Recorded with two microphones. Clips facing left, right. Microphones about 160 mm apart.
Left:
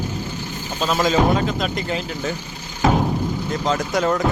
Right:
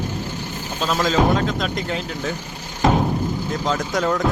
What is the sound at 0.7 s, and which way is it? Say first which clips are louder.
Speech: left 1 dB; 5° left (ahead or behind).